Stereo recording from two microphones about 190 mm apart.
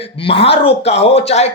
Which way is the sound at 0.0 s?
30° left (ahead or behind).